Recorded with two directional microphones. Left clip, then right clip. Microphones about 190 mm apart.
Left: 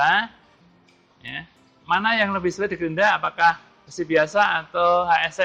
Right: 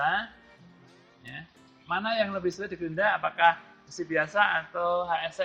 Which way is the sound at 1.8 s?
45° left (ahead or behind).